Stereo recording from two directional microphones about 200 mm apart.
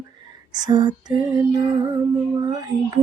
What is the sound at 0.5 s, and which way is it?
Female singing, 20° right (ahead or behind).